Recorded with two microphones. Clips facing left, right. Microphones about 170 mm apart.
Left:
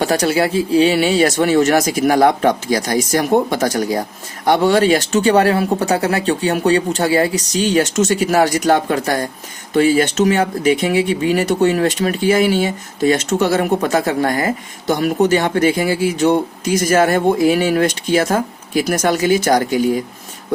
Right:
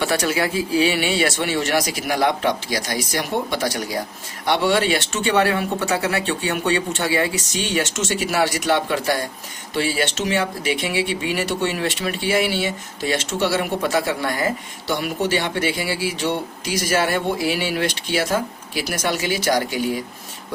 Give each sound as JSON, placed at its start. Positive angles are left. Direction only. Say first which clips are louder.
{"t": 0.0, "sound": "speech", "louder": "left 5 dB", "side_deg": 35}